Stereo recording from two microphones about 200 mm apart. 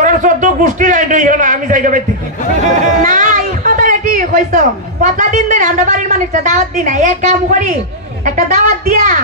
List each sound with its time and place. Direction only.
0.0 s a man's voice: 40° right (ahead or behind)